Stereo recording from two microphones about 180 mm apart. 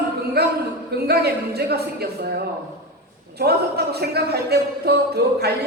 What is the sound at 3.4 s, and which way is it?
Speech, 60° right (ahead or behind).